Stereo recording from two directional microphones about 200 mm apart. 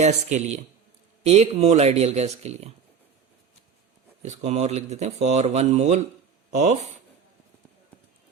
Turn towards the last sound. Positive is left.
turn(degrees=-35)  # may be behind; listen again after turning